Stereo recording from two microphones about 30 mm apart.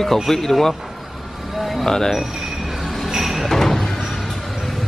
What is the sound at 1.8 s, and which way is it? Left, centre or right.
Speech, centre.